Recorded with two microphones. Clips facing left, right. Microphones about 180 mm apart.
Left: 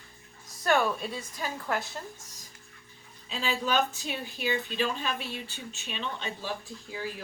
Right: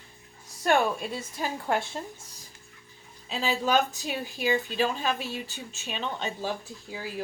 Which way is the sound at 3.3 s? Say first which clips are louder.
Right 4 dB; 40° right (ahead or behind).